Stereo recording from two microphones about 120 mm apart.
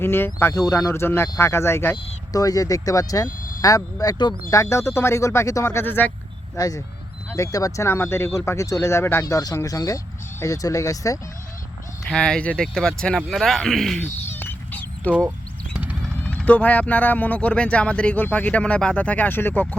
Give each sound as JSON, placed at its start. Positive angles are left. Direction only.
{"t": 0.0, "sound": "speech", "side_deg": 20}
{"t": 2.3, "sound": "speech", "side_deg": 30}
{"t": 6.6, "sound": "speech", "side_deg": 30}
{"t": 12.0, "sound": "speech", "side_deg": 5}
{"t": 14.0, "sound": "a sound", "side_deg": 15}
{"t": 16.2, "sound": "speech", "side_deg": 10}